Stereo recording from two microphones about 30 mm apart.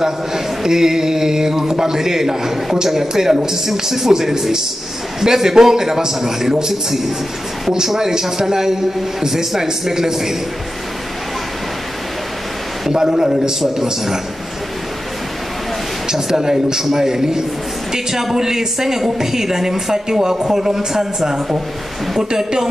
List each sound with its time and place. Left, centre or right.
0.0 s a man's voice: centre
12.9 s a man's voice: centre
16.1 s a man's voice: centre
22.3 s a man's voice: right